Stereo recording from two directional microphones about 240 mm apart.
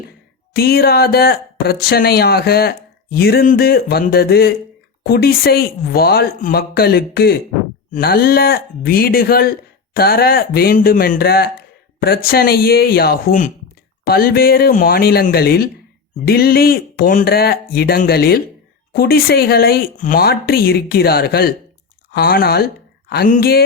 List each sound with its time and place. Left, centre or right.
0.5 s speech: left